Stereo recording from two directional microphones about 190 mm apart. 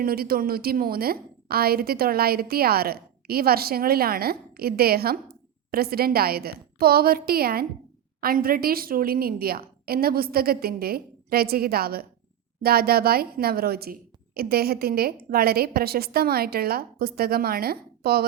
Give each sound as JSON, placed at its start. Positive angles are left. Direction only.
{"t": 0.0, "sound": "a woman's voice", "side_deg": -55}